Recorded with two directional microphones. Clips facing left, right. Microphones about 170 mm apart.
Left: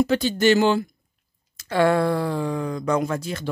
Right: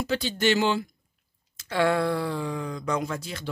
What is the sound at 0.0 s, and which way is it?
Speech, 50° left (ahead or behind).